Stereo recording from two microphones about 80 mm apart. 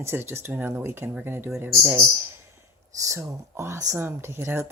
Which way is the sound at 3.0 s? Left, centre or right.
Right.